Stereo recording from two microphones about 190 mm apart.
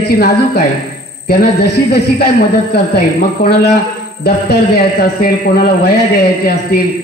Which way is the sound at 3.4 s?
60° left (ahead or behind).